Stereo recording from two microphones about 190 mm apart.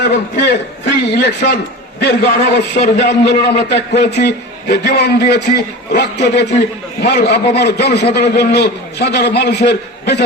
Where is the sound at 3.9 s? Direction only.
60° left (ahead or behind).